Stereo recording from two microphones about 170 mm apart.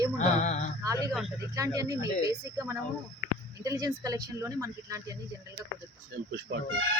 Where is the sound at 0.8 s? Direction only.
20° right (ahead or behind).